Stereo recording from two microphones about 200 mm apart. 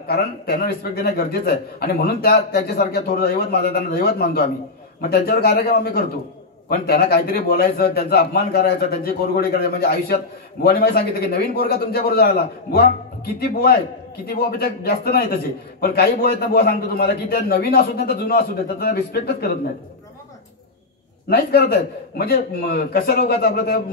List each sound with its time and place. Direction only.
0.0 s a man's voice: 50° left (ahead or behind)
21.3 s a man's voice: 50° left (ahead or behind)